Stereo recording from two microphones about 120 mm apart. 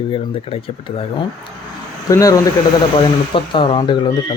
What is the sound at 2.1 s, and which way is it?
Speech, 30° left (ahead or behind).